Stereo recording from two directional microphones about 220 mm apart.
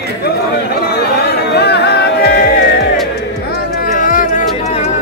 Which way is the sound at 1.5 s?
50° left (ahead or behind).